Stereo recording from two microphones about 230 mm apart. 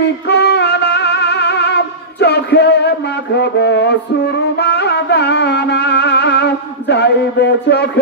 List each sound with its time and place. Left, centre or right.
0.3 s music: left